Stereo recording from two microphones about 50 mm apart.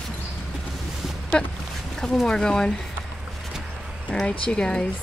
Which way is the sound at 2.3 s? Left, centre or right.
Centre.